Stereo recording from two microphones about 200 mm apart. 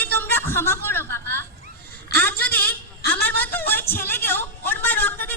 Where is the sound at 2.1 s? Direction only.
50° left (ahead or behind).